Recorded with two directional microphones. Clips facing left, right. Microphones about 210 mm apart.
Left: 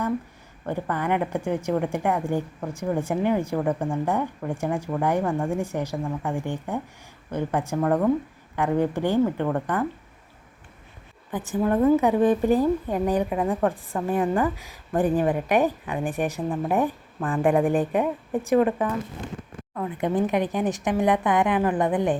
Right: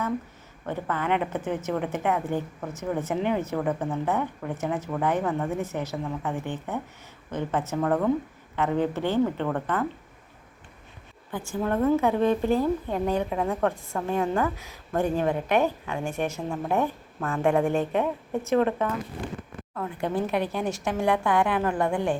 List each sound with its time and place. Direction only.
0.6 s a woman's voice: 10° left (ahead or behind)
11.3 s a woman's voice: 15° left (ahead or behind)